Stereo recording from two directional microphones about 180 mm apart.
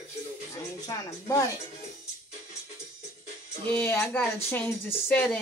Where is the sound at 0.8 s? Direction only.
20° left (ahead or behind).